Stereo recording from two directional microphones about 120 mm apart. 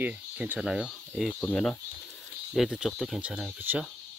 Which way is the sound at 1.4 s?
10° left (ahead or behind).